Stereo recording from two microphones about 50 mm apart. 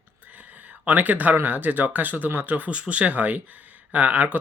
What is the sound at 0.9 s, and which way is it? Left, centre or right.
Speech, right.